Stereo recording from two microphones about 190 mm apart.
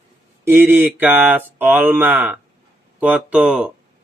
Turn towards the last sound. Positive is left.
turn(degrees=-5)  # may be behind; listen again after turning